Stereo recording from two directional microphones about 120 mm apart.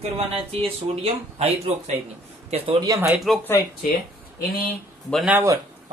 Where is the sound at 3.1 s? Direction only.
Centre (ahead or behind).